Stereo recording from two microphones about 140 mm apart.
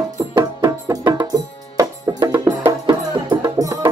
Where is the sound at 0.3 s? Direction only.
30° right (ahead or behind).